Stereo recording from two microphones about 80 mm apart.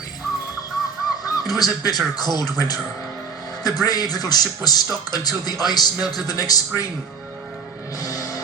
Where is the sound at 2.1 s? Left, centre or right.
Left.